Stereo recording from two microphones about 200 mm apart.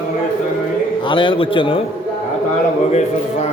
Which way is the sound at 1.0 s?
25° left (ahead or behind).